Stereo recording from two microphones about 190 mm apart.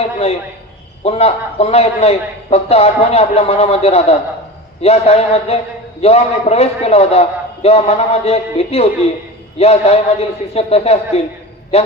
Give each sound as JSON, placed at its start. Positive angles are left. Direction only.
{"t": 0.0, "sound": "a man's voice", "side_deg": 35}